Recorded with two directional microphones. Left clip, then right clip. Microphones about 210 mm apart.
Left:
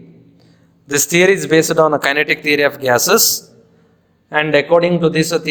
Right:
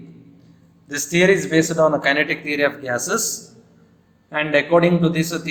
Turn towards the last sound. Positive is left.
turn(degrees=45)  # may be behind; listen again after turning